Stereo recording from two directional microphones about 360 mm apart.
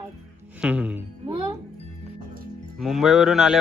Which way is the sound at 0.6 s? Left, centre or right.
Centre.